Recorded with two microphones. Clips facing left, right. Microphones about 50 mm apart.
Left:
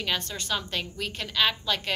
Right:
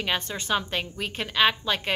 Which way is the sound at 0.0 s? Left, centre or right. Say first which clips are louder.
Right 2 dB; right.